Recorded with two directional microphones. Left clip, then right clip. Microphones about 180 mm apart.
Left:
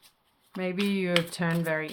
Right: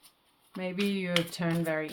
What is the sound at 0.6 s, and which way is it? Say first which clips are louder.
Speech: left 3 dB; 20° left (ahead or behind).